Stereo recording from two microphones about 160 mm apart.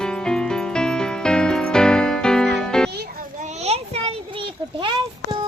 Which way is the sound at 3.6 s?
40° right (ahead or behind).